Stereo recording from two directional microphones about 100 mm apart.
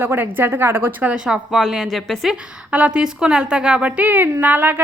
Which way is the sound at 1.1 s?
5° right (ahead or behind).